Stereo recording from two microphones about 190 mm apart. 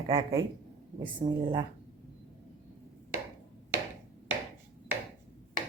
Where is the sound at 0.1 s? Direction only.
20° right (ahead or behind).